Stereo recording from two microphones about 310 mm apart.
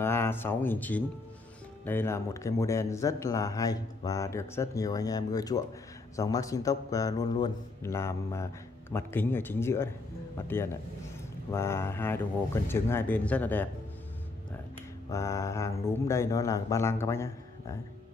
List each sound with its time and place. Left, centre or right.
0.0 s speech: centre
15.0 s speech: centre